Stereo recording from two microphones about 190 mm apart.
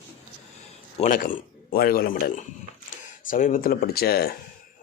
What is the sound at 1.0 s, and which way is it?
Speech, 45° left (ahead or behind).